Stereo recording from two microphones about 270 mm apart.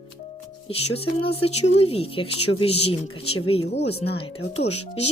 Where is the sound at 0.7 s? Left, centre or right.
Left.